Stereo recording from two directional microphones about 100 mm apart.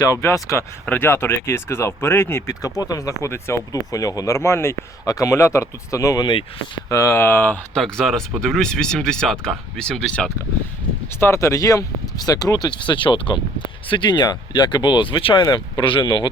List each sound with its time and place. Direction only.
0.0 s speech: 30° left (ahead or behind)
7.8 s speech: 5° left (ahead or behind)
11.2 s speech: 30° left (ahead or behind); by 16.3 s 50° left (ahead or behind)